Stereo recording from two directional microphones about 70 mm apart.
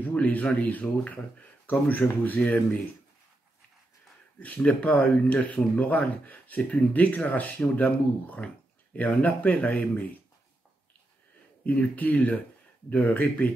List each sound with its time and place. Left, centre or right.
0.0 s speech: left
4.4 s speech: centre
11.6 s speech: left